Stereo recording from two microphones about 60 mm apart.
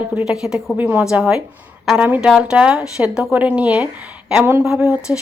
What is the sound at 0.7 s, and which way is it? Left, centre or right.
Speech, right.